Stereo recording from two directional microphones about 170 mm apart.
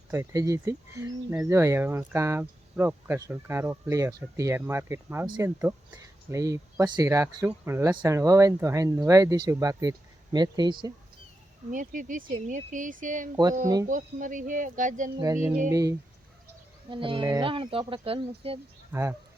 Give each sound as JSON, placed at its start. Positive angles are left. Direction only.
{"t": 0.1, "sound": "speech", "side_deg": -15}
{"t": 11.7, "sound": "speech", "side_deg": -50}
{"t": 13.3, "sound": "speech", "side_deg": -20}
{"t": 13.8, "sound": "speech", "side_deg": -50}
{"t": 15.2, "sound": "speech", "side_deg": -15}
{"t": 18.9, "sound": "speech", "side_deg": -15}